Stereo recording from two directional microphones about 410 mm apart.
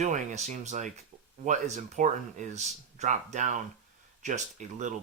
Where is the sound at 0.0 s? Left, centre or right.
Centre.